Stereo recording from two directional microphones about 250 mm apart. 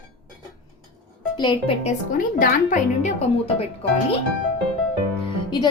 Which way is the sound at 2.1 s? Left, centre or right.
Left.